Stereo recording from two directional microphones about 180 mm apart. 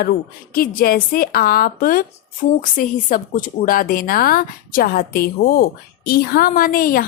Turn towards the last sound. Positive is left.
turn(degrees=50)  # may be behind; listen again after turning